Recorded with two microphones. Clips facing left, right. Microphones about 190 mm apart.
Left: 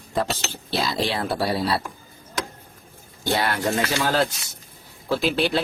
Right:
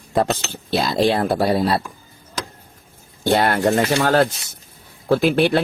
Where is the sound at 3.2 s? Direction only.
55° right (ahead or behind).